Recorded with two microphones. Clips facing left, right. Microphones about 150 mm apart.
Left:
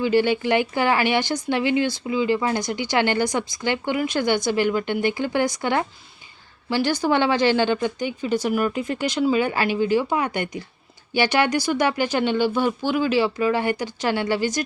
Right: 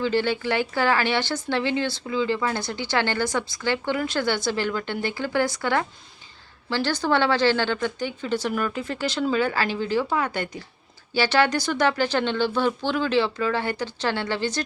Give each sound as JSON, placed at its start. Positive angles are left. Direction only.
{"t": 0.0, "sound": "speech", "side_deg": 15}